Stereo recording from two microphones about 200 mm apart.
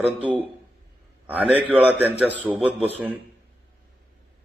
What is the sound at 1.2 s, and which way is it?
A man's voice, 5° right (ahead or behind).